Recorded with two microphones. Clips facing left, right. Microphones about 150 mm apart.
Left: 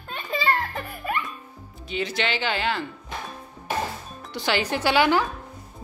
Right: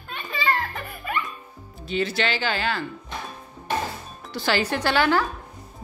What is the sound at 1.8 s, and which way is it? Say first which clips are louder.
Speech: right 2 dB; 15° left (ahead or behind).